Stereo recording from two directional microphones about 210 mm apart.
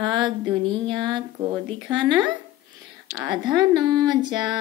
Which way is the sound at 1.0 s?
20° right (ahead or behind).